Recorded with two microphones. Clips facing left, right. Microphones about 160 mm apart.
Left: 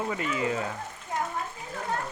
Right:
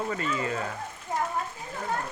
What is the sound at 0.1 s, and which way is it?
Speech, 15° left (ahead or behind).